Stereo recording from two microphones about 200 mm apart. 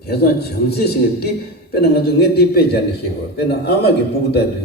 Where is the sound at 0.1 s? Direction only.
50° left (ahead or behind).